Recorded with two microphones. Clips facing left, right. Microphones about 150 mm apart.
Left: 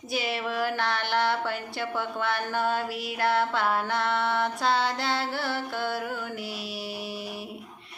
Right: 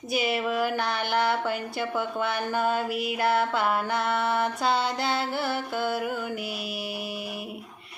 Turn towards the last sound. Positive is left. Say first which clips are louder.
# right 2 dB
turn(degrees=-55)  # may be behind; listen again after turning